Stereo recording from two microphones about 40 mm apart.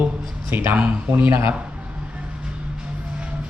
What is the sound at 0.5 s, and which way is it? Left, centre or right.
Speech, right.